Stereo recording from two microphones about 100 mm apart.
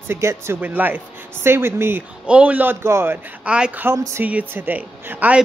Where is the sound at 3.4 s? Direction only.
10° right (ahead or behind).